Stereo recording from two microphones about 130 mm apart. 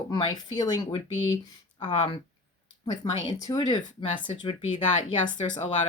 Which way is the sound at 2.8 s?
30° left (ahead or behind).